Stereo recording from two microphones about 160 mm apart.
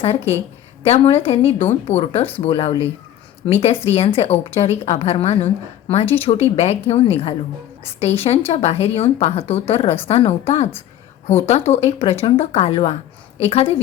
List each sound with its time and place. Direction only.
0.0 s a woman's voice: 40° left (ahead or behind)